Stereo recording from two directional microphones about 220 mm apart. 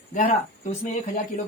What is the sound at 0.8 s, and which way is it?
Speech, 35° left (ahead or behind).